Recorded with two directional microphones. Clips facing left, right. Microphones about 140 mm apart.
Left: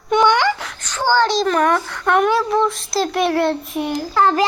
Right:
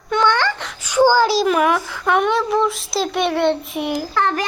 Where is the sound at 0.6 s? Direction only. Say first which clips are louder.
Right 8 dB; 5° right (ahead or behind).